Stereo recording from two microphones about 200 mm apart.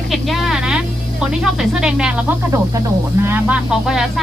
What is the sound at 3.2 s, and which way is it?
Speech, 10° right (ahead or behind).